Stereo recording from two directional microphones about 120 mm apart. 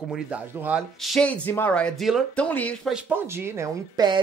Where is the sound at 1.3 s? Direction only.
15° left (ahead or behind).